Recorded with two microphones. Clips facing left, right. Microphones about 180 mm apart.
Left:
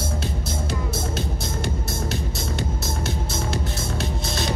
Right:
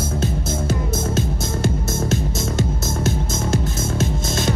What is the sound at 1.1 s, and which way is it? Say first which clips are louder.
Music: right 5 dB; 45° right (ahead or behind).